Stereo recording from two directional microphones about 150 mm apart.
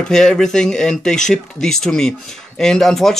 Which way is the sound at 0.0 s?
5° left (ahead or behind).